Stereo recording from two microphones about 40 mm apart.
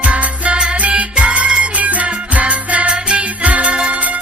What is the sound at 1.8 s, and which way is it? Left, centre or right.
Music, right.